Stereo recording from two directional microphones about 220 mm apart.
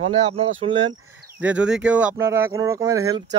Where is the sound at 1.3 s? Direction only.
5° right (ahead or behind).